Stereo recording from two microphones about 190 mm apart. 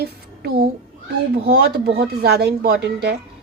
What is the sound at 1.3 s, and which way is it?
A woman's voice, 60° right (ahead or behind).